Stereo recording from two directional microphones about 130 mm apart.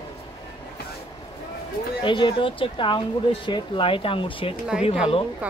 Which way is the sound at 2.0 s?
40° left (ahead or behind).